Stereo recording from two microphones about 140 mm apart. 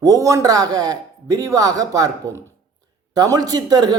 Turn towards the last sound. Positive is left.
turn(degrees=-30)  # may be behind; listen again after turning